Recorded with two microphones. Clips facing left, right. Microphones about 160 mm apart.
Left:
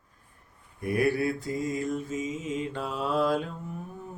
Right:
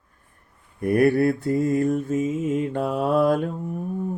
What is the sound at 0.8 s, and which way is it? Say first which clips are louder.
Mantra: right 8 dB; 55° right (ahead or behind).